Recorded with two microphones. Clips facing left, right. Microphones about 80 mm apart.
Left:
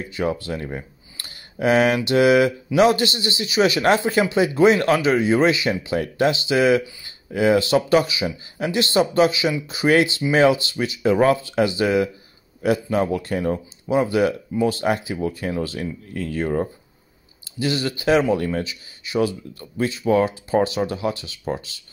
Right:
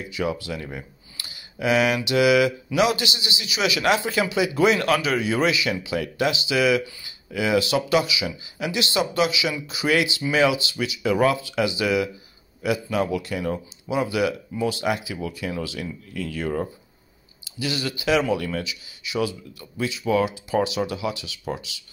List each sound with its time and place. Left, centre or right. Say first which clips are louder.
0.0 s speech: left 3 dB; left